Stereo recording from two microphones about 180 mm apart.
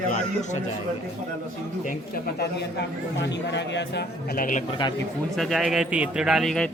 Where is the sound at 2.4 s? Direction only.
70° left (ahead or behind); by 4.6 s 50° left (ahead or behind).